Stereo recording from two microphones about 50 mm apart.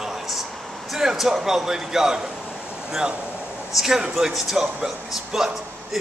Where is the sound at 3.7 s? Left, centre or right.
Centre.